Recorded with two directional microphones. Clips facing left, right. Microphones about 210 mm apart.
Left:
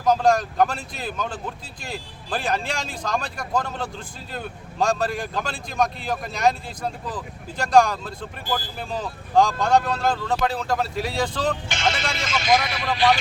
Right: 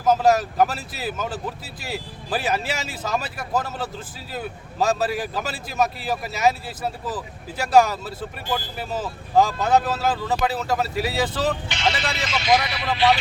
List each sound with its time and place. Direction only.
0.0 s speech: 5° right (ahead or behind)
11.7 s speech: 45° left (ahead or behind)